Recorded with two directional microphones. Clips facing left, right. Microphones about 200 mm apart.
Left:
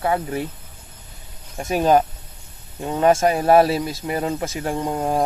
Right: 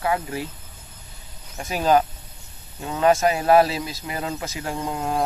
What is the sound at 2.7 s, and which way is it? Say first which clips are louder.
Speech: left 2 dB; 25° left (ahead or behind).